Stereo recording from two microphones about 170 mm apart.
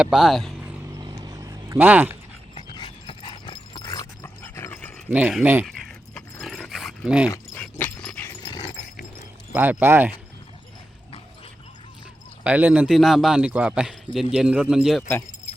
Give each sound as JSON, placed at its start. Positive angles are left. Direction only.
{"t": 0.0, "sound": "a man's voice", "side_deg": -5}
{"t": 0.6, "sound": "a sound", "side_deg": -15}
{"t": 2.6, "sound": "dog", "side_deg": 30}
{"t": 5.0, "sound": "speech", "side_deg": -10}
{"t": 6.1, "sound": "dog", "side_deg": 5}
{"t": 7.5, "sound": "dog", "side_deg": 10}
{"t": 8.4, "sound": "dog", "side_deg": 25}
{"t": 9.6, "sound": "speech", "side_deg": -15}
{"t": 12.5, "sound": "a man's voice", "side_deg": -10}